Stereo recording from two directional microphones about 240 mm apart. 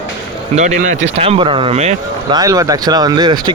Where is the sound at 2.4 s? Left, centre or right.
Centre.